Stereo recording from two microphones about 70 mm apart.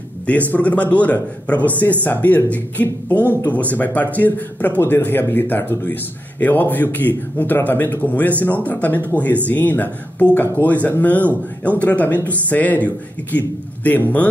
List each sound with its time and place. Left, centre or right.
0.5 s speech: left